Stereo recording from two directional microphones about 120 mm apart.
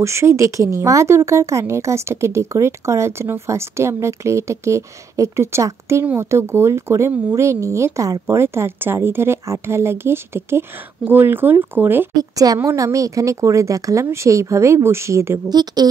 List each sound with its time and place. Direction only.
0.0 s speech: 25° right (ahead or behind)
12.2 s a woman's voice: 30° right (ahead or behind)
15.5 s a woman's voice: 35° right (ahead or behind)